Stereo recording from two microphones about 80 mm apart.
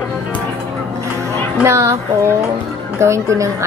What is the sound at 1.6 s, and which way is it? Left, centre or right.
A woman's voice, right.